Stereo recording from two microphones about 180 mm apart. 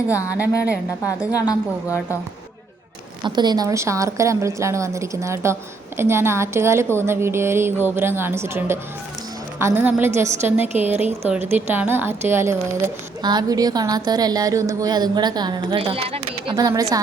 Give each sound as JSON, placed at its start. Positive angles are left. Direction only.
{"t": 1.3, "sound": "a woman's voice", "side_deg": 20}
{"t": 3.2, "sound": "a woman's voice", "side_deg": -25}